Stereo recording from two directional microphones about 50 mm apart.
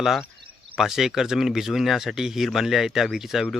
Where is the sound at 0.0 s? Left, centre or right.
Centre.